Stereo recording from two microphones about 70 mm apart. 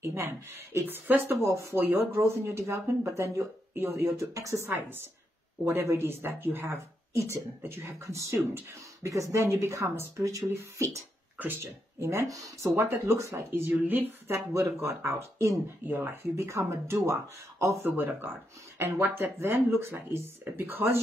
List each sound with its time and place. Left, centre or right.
0.0 s speech: right
1.4 s speech: right
1.9 s speech: right
2.1 s speech: right
11.3 s speech: right
11.6 s speech: right
14.5 s speech: right
15.9 s speech: right
17.8 s speech: right